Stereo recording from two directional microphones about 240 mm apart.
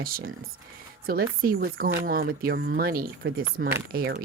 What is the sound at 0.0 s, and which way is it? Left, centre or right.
Speech, right.